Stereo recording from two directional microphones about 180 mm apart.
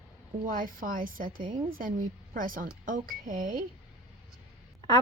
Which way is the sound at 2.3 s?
50° right (ahead or behind).